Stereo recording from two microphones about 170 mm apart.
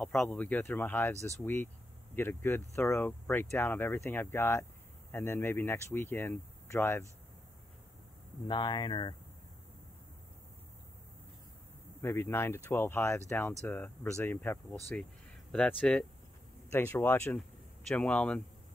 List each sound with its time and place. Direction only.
0.0 s speech: 5° left (ahead or behind)
8.5 s speech: 30° left (ahead or behind)
12.0 s speech: 15° left (ahead or behind)